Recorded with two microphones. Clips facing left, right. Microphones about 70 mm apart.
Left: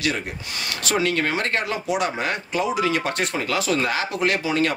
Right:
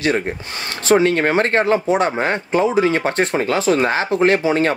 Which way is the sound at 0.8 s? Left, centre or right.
Right.